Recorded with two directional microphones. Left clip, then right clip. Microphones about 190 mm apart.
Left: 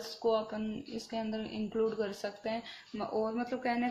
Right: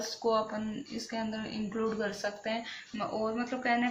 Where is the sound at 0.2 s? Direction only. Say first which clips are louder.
Right 1 dB; 30° left (ahead or behind).